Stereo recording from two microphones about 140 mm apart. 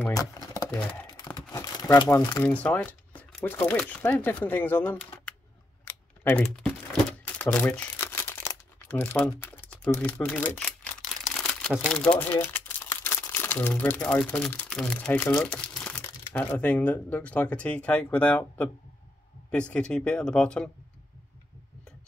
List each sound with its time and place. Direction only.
0.1 s a sound: 25° left (ahead or behind)
1.5 s crumpling: 25° left (ahead or behind)
2.4 s speech: 10° left (ahead or behind)
6.5 s crumpling: 5° left (ahead or behind)
14.7 s speech: 5° left (ahead or behind)
19.7 s speech: 5° left (ahead or behind)